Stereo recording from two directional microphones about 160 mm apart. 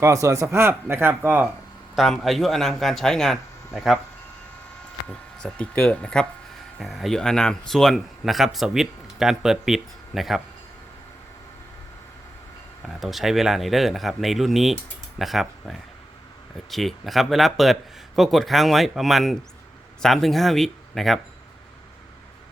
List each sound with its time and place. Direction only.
0.0 s speech: 20° right (ahead or behind)
2.0 s speech: centre (ahead or behind)
5.4 s speech: 10° left (ahead or behind)
12.9 s speech: centre (ahead or behind)